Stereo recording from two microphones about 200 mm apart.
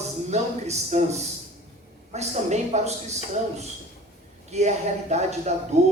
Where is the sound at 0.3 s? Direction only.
35° right (ahead or behind).